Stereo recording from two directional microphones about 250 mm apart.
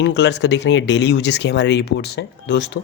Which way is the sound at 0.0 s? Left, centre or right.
Left.